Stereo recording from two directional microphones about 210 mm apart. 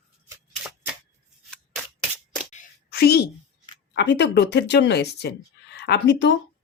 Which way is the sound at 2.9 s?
50° left (ahead or behind).